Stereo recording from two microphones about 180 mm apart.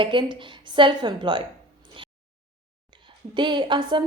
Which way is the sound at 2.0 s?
30° right (ahead or behind).